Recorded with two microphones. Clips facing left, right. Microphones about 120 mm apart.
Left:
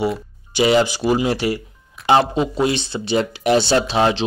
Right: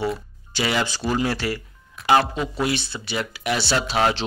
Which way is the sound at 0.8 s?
15° left (ahead or behind).